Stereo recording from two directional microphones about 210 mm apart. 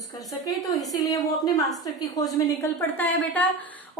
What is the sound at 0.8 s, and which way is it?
A woman's voice, 15° left (ahead or behind).